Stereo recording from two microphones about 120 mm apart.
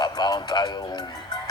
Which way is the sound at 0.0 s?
35° left (ahead or behind).